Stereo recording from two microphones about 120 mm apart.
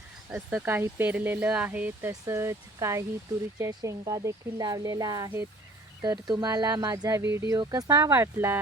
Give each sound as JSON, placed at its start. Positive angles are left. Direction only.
{"t": 0.3, "sound": "speech", "side_deg": -15}